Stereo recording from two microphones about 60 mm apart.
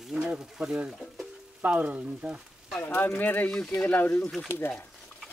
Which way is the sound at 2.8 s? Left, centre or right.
Left.